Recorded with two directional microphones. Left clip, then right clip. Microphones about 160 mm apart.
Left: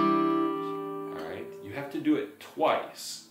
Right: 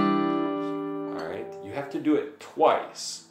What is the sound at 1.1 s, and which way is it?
Speech, centre (ahead or behind).